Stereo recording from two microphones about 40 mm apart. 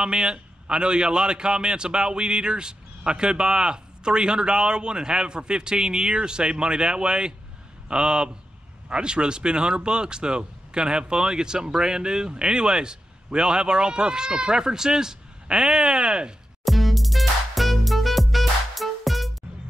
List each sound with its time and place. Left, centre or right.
0.0 s speech: right
16.6 s music: centre